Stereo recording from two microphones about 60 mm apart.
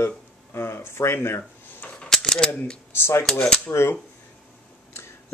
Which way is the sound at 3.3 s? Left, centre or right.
Centre.